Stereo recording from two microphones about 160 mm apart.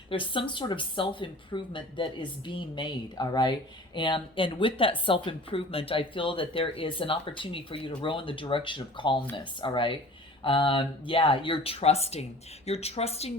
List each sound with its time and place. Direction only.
0.1 s speech: 30° left (ahead or behind)